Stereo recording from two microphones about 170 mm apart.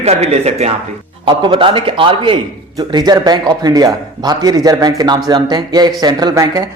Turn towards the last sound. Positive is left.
turn(degrees=-20)  # may be behind; listen again after turning